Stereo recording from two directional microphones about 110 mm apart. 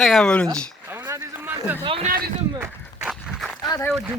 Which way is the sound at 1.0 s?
30° right (ahead or behind).